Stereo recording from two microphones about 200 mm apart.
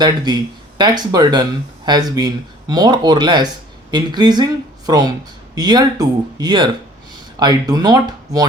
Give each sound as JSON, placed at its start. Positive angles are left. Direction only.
{"t": 0.3, "sound": "speech", "side_deg": -20}